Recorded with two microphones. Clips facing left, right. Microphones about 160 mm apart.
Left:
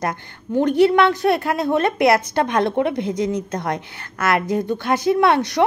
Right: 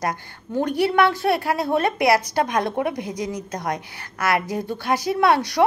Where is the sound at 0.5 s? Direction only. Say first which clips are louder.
Left 6 dB; 20° left (ahead or behind).